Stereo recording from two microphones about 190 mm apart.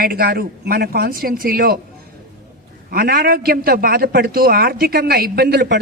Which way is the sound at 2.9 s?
55° right (ahead or behind).